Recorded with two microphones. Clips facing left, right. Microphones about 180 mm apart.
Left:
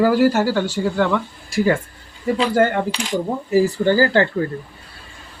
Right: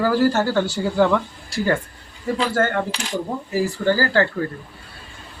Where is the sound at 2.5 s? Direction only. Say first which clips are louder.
Left 4 dB; 15° left (ahead or behind).